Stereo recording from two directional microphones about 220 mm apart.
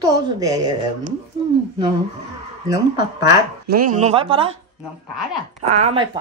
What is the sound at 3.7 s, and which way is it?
Speech, 40° right (ahead or behind).